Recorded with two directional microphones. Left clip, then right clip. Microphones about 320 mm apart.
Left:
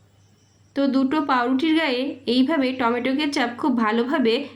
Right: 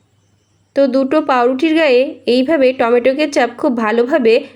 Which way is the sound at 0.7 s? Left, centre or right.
Centre.